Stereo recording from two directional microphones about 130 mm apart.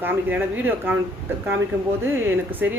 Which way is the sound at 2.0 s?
20° right (ahead or behind).